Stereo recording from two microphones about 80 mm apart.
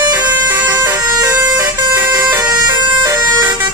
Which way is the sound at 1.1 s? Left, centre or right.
Right.